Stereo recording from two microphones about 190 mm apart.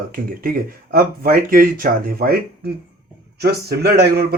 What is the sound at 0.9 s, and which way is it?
A man's voice, 50° right (ahead or behind).